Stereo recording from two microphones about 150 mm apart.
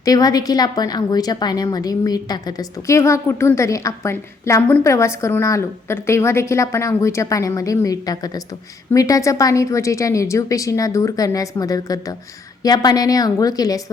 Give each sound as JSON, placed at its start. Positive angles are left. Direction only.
{"t": 0.0, "sound": "a woman's voice", "side_deg": 25}